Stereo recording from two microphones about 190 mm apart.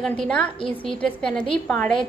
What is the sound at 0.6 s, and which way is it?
Speech, 25° left (ahead or behind).